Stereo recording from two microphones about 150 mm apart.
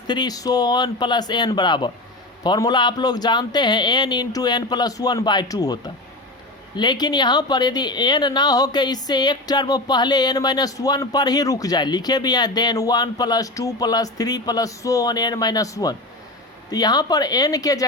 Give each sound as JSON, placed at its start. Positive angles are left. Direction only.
{"t": 0.1, "sound": "speech", "side_deg": 25}